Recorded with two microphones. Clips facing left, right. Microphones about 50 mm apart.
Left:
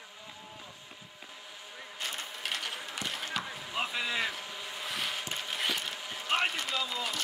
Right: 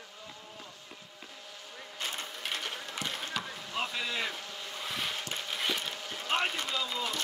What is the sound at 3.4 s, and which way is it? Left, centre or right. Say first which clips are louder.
Basketball bounce: left 1 dB; centre.